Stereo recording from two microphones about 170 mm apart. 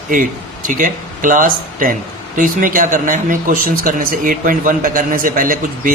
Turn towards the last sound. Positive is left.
turn(degrees=-55)  # may be behind; listen again after turning